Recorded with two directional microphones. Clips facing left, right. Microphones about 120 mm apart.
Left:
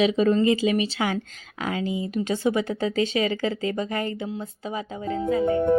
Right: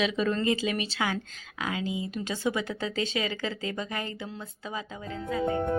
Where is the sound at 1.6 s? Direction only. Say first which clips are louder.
Left 4 dB; 35° left (ahead or behind).